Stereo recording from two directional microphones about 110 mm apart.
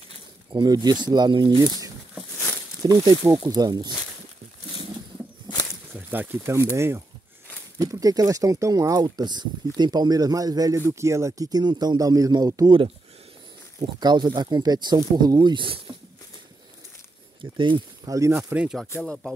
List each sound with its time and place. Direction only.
0.5 s speech: 45° right (ahead or behind)
2.8 s speech: 35° right (ahead or behind)
5.9 s speech: 15° right (ahead or behind); by 12.7 s 35° right (ahead or behind)
13.7 s speech: 40° right (ahead or behind)
17.4 s speech: 45° right (ahead or behind)
18.0 s speech: 30° right (ahead or behind)
18.5 s speech: 10° right (ahead or behind)